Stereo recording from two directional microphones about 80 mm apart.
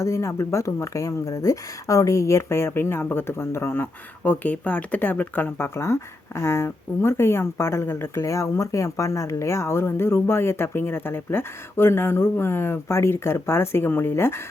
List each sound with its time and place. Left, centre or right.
0.0 s speech: left